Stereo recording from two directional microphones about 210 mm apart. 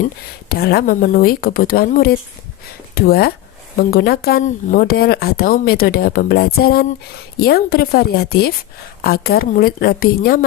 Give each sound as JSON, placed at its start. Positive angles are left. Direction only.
{"t": 0.4, "sound": "speech", "side_deg": 45}